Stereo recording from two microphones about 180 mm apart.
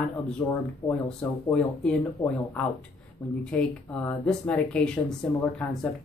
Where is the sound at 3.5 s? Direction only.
5° left (ahead or behind).